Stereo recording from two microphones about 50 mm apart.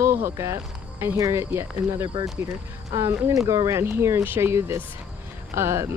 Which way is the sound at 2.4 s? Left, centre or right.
Right.